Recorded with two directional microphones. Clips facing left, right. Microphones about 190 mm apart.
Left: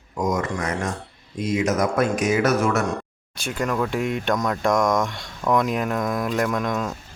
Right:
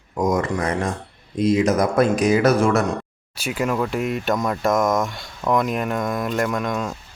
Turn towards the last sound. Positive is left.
turn(degrees=0)  # may be behind; listen again after turning